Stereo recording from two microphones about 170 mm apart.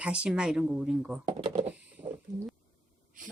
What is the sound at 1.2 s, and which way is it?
Speech, 35° right (ahead or behind).